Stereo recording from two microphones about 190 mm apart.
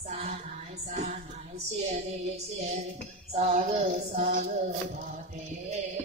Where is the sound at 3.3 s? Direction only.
35° right (ahead or behind).